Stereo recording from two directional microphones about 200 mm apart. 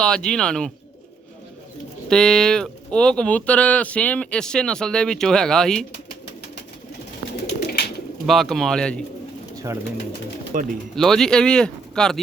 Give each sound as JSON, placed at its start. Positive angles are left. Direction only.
{"t": 0.0, "sound": "speech", "side_deg": 5}
{"t": 2.0, "sound": "speech", "side_deg": 5}
{"t": 7.4, "sound": "bird", "side_deg": 55}
{"t": 8.3, "sound": "speech", "side_deg": 0}
{"t": 10.5, "sound": "speech", "side_deg": -45}
{"t": 10.9, "sound": "speech", "side_deg": 0}